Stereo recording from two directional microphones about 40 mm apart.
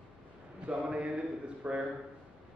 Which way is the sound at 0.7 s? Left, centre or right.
Right.